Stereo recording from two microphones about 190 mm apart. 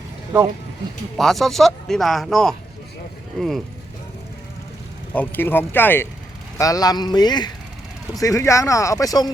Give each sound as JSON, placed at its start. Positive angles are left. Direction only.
{"t": 1.1, "sound": "speech", "side_deg": 0}
{"t": 5.1, "sound": "speech", "side_deg": 10}